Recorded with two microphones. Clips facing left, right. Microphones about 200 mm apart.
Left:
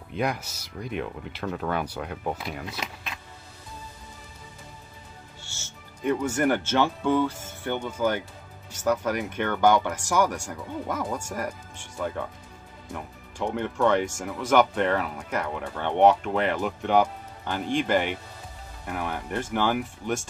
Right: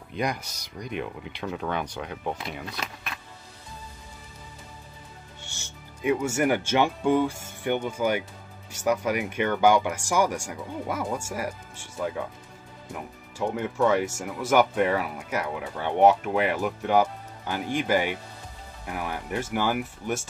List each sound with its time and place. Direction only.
0.1 s speech: 5° left (ahead or behind)
2.8 s speech: 20° left (ahead or behind)
5.4 s speech: 15° right (ahead or behind)